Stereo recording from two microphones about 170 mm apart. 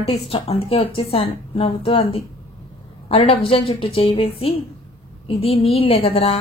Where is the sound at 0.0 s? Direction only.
35° left (ahead or behind).